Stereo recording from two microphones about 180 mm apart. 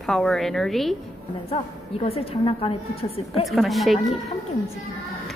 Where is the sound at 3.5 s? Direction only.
Centre (ahead or behind).